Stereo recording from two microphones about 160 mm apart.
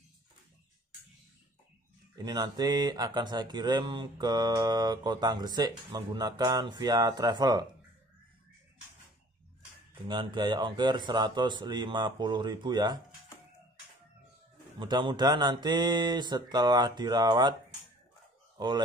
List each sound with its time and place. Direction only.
2.1 s speech: 25° right (ahead or behind)
10.0 s speech: 30° right (ahead or behind)
14.8 s speech: 30° right (ahead or behind)
18.6 s speech: 25° right (ahead or behind)